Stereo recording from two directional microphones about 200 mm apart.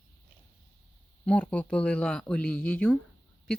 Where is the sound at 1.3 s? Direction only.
5° left (ahead or behind).